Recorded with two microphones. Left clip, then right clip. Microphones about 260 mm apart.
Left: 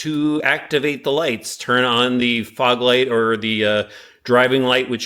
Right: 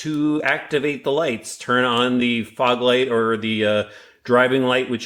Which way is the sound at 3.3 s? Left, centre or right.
Centre.